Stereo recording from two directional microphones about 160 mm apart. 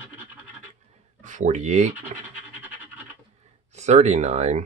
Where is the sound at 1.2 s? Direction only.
50° right (ahead or behind).